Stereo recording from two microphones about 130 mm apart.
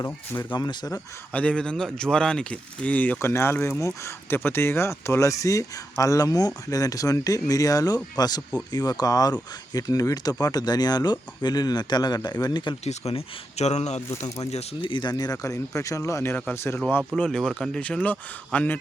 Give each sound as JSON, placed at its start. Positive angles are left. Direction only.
{"t": 0.5, "sound": "speech", "side_deg": 35}
{"t": 1.3, "sound": "speech", "side_deg": 10}
{"t": 12.8, "sound": "speech", "side_deg": 55}
{"t": 14.5, "sound": "speech", "side_deg": 45}
{"t": 17.2, "sound": "speech", "side_deg": 5}